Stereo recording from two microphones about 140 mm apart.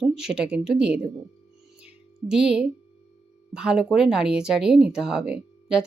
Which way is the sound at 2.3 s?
5° right (ahead or behind).